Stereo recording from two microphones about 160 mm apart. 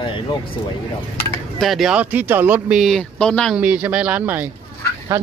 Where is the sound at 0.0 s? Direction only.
30° left (ahead or behind).